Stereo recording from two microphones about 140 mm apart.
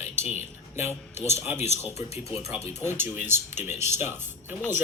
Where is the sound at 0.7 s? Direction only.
15° right (ahead or behind).